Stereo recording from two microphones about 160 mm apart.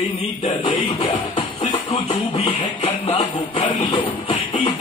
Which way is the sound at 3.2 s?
40° left (ahead or behind).